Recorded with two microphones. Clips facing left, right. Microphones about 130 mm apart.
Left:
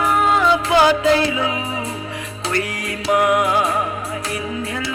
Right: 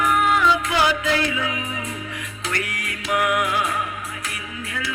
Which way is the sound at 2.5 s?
35° left (ahead or behind).